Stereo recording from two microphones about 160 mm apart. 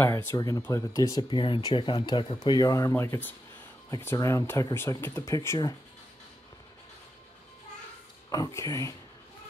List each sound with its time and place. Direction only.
0.0 s speech: 15° left (ahead or behind)
8.3 s speech: 20° left (ahead or behind)